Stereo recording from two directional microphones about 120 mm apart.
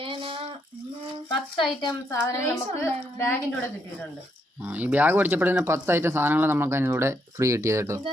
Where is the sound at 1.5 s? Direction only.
45° left (ahead or behind).